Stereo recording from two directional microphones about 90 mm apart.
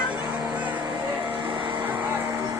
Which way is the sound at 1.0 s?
20° right (ahead or behind).